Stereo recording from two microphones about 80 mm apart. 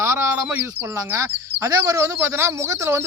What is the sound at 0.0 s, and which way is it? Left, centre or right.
Bird, right.